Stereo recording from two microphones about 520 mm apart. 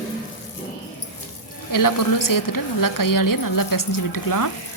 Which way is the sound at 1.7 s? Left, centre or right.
Left.